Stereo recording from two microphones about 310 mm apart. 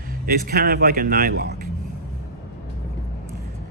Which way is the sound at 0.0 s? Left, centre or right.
Right.